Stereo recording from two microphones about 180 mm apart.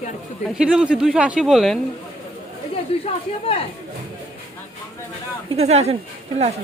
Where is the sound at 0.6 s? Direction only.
5° right (ahead or behind).